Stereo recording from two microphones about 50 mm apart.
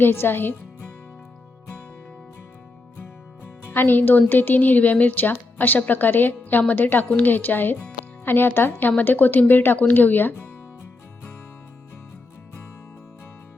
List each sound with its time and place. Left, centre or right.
0.0 s speech: left
3.8 s a woman's voice: left